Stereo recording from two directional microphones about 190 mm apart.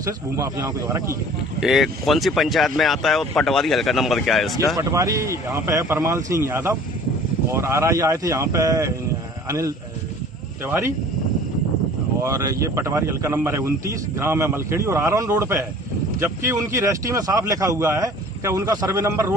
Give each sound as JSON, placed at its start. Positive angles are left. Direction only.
{"t": 0.0, "sound": "speech", "side_deg": -15}
{"t": 1.6, "sound": "speech", "side_deg": 0}
{"t": 4.8, "sound": "speech", "side_deg": -15}
{"t": 12.2, "sound": "speech", "side_deg": -15}